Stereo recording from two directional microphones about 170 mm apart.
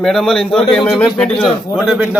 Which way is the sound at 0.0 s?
Centre (ahead or behind).